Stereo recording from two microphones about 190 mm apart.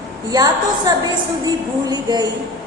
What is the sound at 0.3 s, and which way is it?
A woman's voice, 20° right (ahead or behind).